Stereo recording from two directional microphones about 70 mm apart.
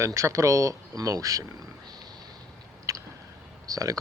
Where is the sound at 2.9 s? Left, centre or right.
Right.